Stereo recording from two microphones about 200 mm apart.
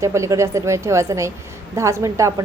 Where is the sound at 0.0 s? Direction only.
15° right (ahead or behind).